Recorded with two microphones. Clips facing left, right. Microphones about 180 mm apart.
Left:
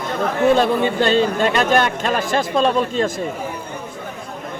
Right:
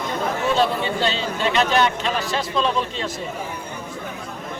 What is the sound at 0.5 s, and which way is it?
Speech, 50° left (ahead or behind).